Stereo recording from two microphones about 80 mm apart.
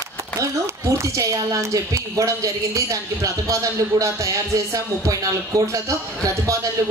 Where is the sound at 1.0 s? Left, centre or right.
Right.